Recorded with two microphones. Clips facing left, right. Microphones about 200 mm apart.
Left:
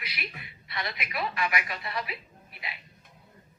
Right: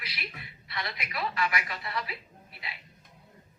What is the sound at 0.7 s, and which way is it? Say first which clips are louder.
Speech: left 2 dB; 25° left (ahead or behind).